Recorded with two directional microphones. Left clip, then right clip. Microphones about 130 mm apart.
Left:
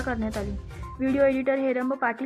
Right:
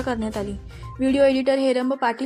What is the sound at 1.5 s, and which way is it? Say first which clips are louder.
Speech: right 5 dB; 30° right (ahead or behind).